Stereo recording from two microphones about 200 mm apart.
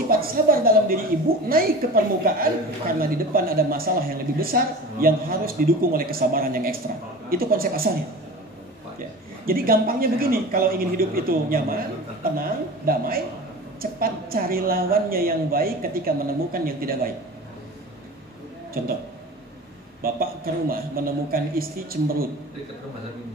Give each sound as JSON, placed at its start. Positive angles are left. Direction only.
{"t": 0.1, "sound": "a woman's voice", "side_deg": -45}
{"t": 9.5, "sound": "a man's voice", "side_deg": -45}
{"t": 20.0, "sound": "a man's voice", "side_deg": -45}